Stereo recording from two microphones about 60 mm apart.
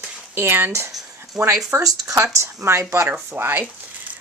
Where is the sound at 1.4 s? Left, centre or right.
Centre.